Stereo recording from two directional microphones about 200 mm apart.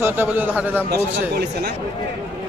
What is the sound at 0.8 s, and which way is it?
Speech, 50° right (ahead or behind).